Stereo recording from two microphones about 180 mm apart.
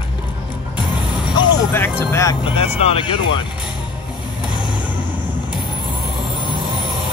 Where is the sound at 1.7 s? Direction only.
10° left (ahead or behind).